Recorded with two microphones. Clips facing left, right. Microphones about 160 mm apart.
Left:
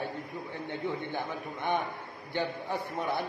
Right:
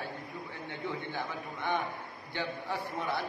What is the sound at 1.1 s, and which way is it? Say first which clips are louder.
A man's voice: left 2 dB; 20° left (ahead or behind).